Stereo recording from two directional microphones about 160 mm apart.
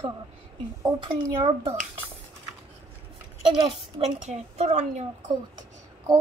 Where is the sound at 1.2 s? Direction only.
25° right (ahead or behind).